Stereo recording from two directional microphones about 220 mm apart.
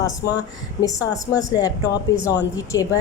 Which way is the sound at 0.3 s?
15° left (ahead or behind).